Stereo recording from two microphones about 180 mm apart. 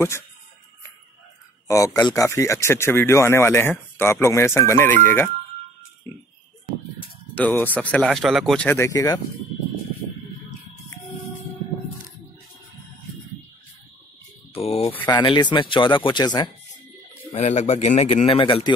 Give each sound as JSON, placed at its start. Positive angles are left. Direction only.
{"t": 1.7, "sound": "speech", "side_deg": 15}
{"t": 7.3, "sound": "speech", "side_deg": 10}
{"t": 14.5, "sound": "a man's voice", "side_deg": 35}
{"t": 17.3, "sound": "a man's voice", "side_deg": 40}